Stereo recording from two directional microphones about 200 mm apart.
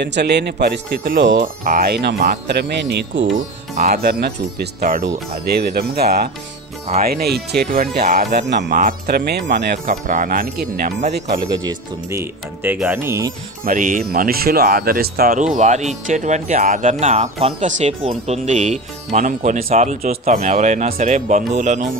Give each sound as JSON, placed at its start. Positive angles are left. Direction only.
{"t": 0.0, "sound": "speech", "side_deg": -55}
{"t": 1.6, "sound": "speech", "side_deg": -45}
{"t": 3.9, "sound": "speech", "side_deg": -55}
{"t": 4.7, "sound": "speech", "side_deg": -40}
{"t": 5.6, "sound": "speech", "side_deg": -50}
{"t": 8.6, "sound": "speech", "side_deg": -45}
{"t": 10.0, "sound": "speech", "side_deg": -40}
{"t": 11.6, "sound": "speech", "side_deg": -15}
{"t": 12.7, "sound": "speech", "side_deg": 0}
{"t": 13.0, "sound": "speech", "side_deg": -15}
{"t": 13.7, "sound": "speech", "side_deg": -40}
{"t": 15.5, "sound": "speech", "side_deg": -35}